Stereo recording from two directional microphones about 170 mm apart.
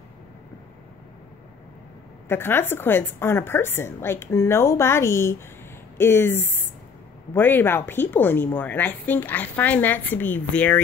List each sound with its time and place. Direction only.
2.2 s a woman's voice: 10° left (ahead or behind)